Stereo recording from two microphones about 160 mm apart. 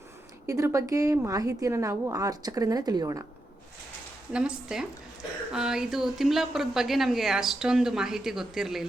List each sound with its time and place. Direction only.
0.4 s a woman's voice: 20° right (ahead or behind)
4.3 s a woman's voice: 5° right (ahead or behind)